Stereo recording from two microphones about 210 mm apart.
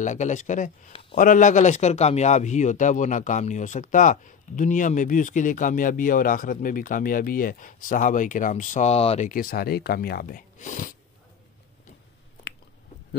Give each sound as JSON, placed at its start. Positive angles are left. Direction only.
{"t": 0.0, "sound": "speech", "side_deg": 35}
{"t": 9.3, "sound": "speech", "side_deg": 45}